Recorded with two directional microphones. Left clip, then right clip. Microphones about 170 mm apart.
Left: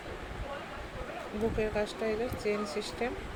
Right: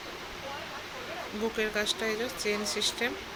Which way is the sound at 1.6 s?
5° left (ahead or behind).